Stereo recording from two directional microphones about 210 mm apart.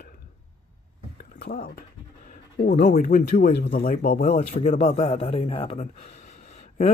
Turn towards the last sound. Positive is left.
turn(degrees=30)  # may be behind; listen again after turning